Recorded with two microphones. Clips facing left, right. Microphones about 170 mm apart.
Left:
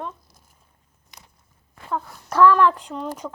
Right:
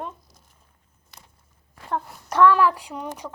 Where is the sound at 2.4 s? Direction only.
5° right (ahead or behind).